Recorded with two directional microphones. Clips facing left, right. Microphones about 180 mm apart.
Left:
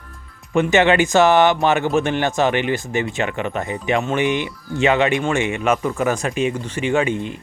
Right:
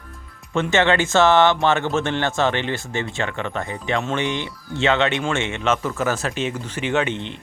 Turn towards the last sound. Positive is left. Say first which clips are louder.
# left 3 dB
turn(degrees=10)  # may be behind; listen again after turning